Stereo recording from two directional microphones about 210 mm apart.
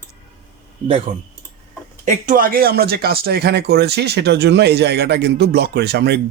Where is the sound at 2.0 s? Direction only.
35° right (ahead or behind).